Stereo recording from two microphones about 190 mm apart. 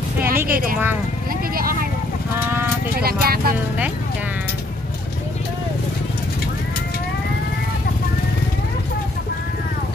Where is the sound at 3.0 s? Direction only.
55° right (ahead or behind).